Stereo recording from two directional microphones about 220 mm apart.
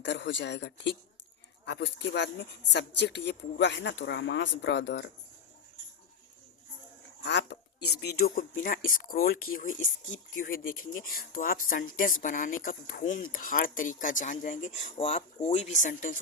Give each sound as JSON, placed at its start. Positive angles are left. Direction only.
{"t": 0.0, "sound": "speech", "side_deg": 55}
{"t": 7.2, "sound": "speech", "side_deg": 55}